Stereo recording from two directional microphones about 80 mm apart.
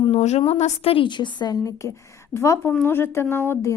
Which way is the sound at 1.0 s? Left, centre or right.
Left.